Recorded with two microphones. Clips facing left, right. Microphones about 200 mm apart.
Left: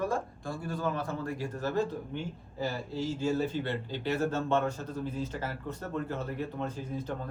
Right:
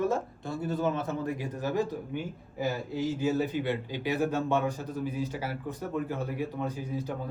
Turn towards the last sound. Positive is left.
turn(degrees=-10)  # may be behind; listen again after turning